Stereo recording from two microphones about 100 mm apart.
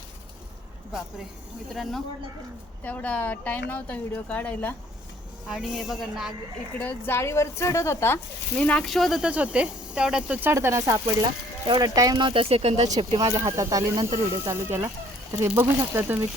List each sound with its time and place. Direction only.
1.7 s a woman's voice: centre (ahead or behind)
2.8 s a woman's voice: 15° left (ahead or behind)
5.5 s a woman's voice: 5° right (ahead or behind)
6.7 s speech: 20° left (ahead or behind)
8.5 s a woman's voice: 10° left (ahead or behind)
8.9 s a woman's voice: centre (ahead or behind)
9.3 s speech: 10° right (ahead or behind)
10.5 s speech: 30° right (ahead or behind)
12.3 s speech: 70° right (ahead or behind)
13.3 s speech: 30° right (ahead or behind)